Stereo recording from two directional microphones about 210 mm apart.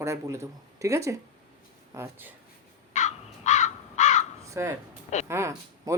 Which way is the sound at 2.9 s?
35° left (ahead or behind).